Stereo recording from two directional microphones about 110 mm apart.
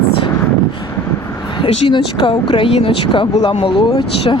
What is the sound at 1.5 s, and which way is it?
Speech, 45° left (ahead or behind).